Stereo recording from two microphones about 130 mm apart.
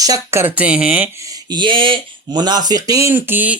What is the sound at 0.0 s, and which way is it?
Speech, 25° right (ahead or behind).